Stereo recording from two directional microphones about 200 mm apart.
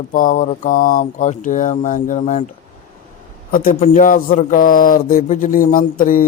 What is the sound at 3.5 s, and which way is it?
Speech, 45° left (ahead or behind).